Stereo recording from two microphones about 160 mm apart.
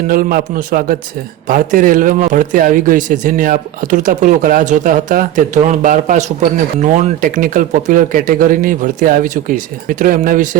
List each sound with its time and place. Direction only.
0.1 s speech: 65° right (ahead or behind)